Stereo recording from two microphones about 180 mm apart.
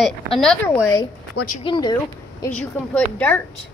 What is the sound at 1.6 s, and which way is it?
Speech, 25° left (ahead or behind).